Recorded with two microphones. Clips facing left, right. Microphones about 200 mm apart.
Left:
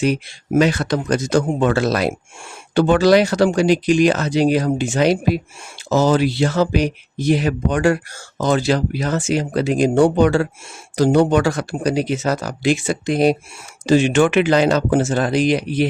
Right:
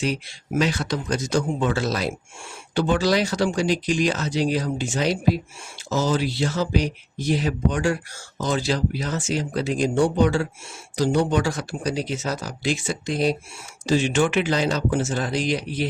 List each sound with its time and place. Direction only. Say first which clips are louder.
0.0 s speech: left 7 dB; 55° left (ahead or behind)